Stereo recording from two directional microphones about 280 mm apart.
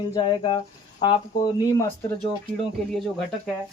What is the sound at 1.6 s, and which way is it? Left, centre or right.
Speech, centre.